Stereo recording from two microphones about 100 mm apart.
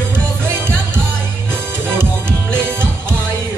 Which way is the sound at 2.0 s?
25° right (ahead or behind).